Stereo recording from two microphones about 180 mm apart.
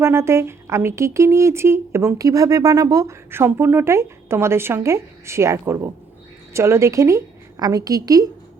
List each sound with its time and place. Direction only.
0.0 s a woman's voice: 15° right (ahead or behind)